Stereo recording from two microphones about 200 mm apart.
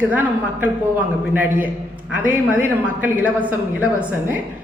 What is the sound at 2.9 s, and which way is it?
A man's voice, 10° right (ahead or behind).